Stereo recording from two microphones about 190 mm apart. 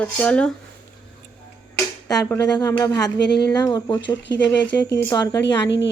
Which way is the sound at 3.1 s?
60° left (ahead or behind).